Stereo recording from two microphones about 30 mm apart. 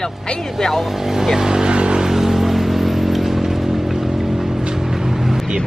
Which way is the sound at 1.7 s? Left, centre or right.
Right.